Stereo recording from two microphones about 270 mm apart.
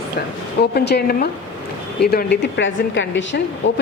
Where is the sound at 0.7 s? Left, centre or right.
Left.